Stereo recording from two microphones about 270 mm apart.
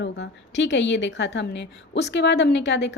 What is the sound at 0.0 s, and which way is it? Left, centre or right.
A woman's voice, left.